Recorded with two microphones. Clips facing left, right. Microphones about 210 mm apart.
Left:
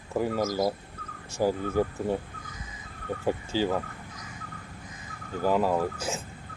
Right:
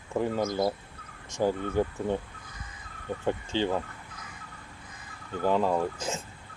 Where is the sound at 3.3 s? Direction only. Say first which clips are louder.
Left 1 dB; 5° left (ahead or behind).